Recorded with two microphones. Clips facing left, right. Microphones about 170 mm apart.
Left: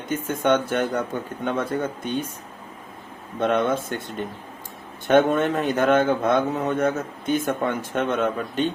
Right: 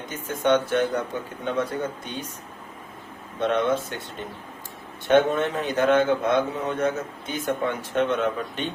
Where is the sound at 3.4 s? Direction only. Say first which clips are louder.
Left 1 dB; 50° left (ahead or behind).